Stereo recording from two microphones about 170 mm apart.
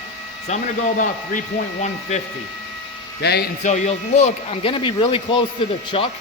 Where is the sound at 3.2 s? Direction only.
70° left (ahead or behind).